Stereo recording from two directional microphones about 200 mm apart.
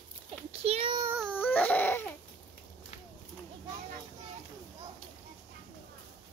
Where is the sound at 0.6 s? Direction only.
30° right (ahead or behind).